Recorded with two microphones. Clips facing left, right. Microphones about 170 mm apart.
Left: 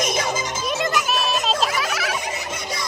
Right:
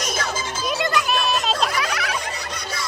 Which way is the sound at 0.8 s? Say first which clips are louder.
Right 1 dB; centre (ahead or behind).